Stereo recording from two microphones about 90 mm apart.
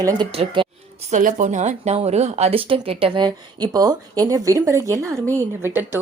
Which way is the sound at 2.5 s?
85° right.